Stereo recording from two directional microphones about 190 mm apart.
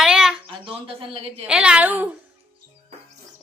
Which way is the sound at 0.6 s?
30° right (ahead or behind).